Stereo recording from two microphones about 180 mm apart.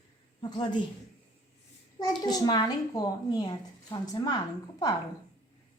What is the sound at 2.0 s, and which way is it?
A woman's voice, 20° left (ahead or behind).